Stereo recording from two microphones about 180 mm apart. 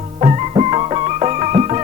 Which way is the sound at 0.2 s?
35° right (ahead or behind).